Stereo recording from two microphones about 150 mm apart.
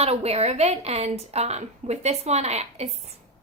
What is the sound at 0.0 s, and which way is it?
A woman's voice, 45° right (ahead or behind).